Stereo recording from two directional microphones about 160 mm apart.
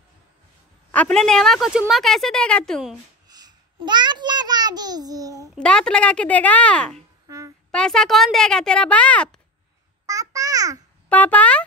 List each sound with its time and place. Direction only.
0.9 s a woman's voice: 5° left (ahead or behind)
3.3 s a child's voice: 25° right (ahead or behind)
5.6 s speech: 5° left (ahead or behind)
7.2 s a sound: 20° right (ahead or behind)
7.7 s a woman's voice: 5° left (ahead or behind)
10.0 s babbling: 20° right (ahead or behind)
11.1 s speech: 10° left (ahead or behind)